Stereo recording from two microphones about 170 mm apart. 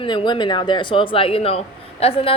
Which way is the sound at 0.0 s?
30° left (ahead or behind).